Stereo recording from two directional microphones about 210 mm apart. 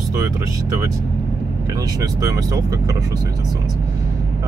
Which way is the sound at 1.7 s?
15° right (ahead or behind).